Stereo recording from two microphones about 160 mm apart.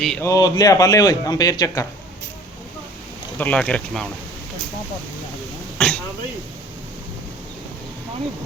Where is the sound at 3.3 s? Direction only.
10° left (ahead or behind).